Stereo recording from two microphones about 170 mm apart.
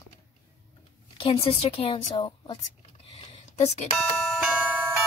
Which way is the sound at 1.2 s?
35° left (ahead or behind).